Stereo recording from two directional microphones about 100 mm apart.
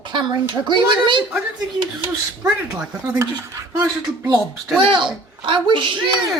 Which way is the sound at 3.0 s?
30° right (ahead or behind).